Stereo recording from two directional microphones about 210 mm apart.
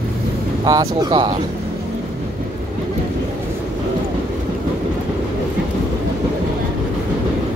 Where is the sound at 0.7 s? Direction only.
20° right (ahead or behind).